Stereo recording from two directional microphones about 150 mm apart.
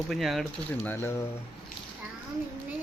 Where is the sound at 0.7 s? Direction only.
15° left (ahead or behind).